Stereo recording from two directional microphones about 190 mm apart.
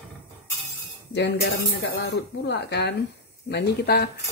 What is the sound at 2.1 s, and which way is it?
A woman's voice, 60° left (ahead or behind).